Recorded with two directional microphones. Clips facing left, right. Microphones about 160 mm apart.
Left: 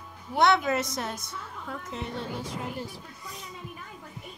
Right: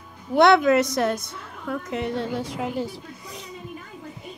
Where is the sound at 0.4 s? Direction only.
75° right (ahead or behind).